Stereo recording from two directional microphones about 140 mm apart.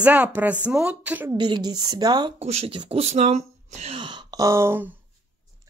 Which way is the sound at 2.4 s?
45° right (ahead or behind).